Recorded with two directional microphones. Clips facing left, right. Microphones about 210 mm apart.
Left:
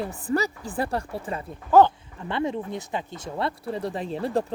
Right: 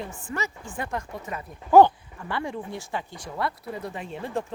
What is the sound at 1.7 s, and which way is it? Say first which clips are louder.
Speech: right 1 dB; 15° right (ahead or behind).